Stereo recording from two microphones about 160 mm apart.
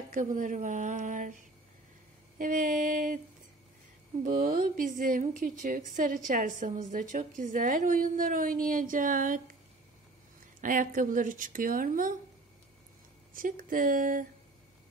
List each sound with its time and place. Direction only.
0.1 s a woman's voice: 55° right (ahead or behind)
4.2 s a woman's voice: 55° right (ahead or behind)
10.6 s a woman's voice: 55° right (ahead or behind)
13.3 s a woman's voice: 60° right (ahead or behind)